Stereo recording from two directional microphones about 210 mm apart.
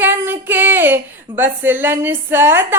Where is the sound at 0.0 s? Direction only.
10° right (ahead or behind).